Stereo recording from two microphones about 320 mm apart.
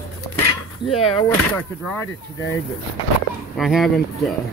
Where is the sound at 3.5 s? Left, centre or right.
Centre.